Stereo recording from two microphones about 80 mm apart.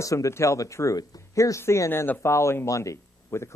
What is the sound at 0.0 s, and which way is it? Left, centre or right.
A man's voice, left.